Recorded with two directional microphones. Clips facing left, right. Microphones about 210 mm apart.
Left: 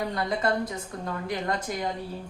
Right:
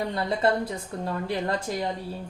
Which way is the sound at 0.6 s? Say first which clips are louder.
Right 2 dB; 30° right (ahead or behind).